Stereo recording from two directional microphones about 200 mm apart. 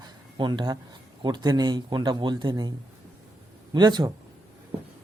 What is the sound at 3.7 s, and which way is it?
Speech, 20° right (ahead or behind).